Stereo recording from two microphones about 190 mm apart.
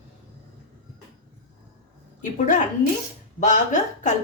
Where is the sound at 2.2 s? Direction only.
40° left (ahead or behind).